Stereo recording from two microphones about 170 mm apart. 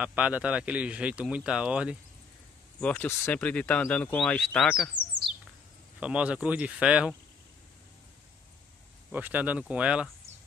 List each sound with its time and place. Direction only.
0.0 s speech: 10° right (ahead or behind)
2.8 s speech: 10° left (ahead or behind)
5.9 s speech: 5° right (ahead or behind)
9.1 s speech: 10° right (ahead or behind)